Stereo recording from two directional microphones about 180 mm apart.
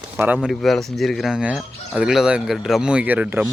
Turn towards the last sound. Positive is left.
turn(degrees=-10)  # may be behind; listen again after turning